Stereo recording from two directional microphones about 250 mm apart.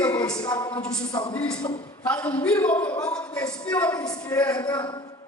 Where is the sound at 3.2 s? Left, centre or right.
Centre.